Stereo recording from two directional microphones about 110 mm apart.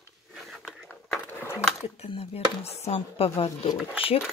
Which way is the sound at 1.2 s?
20° left (ahead or behind).